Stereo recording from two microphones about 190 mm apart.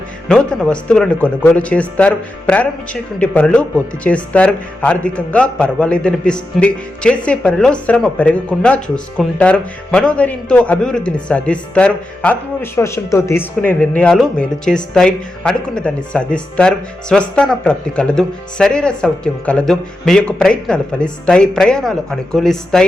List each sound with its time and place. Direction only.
0.3 s a man's voice: 5° left (ahead or behind)